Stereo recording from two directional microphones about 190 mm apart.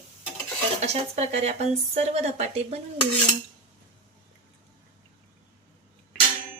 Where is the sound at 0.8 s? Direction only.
35° right (ahead or behind).